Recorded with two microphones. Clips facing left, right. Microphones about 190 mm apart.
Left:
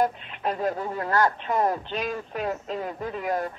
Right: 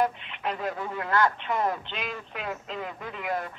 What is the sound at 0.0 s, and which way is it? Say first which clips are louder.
Speech: left 2 dB; 40° left (ahead or behind).